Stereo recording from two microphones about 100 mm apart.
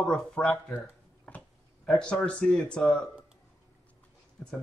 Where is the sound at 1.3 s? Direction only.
15° left (ahead or behind).